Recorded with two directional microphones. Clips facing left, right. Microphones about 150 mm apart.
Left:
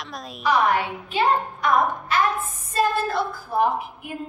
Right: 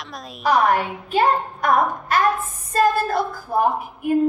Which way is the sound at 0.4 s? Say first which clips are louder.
Right 3 dB; 45° right (ahead or behind).